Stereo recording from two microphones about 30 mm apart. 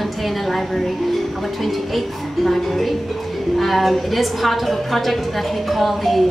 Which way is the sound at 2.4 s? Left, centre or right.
Centre.